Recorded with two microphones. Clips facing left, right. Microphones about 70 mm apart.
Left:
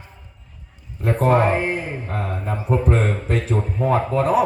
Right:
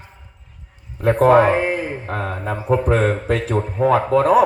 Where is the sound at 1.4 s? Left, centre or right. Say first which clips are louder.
Right 4 dB; right.